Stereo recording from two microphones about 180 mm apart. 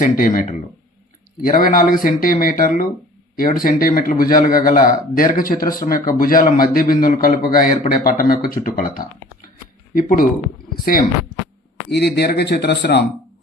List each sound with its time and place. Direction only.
0.0 s a man's voice: 50° left (ahead or behind)
11.9 s speech: 65° left (ahead or behind)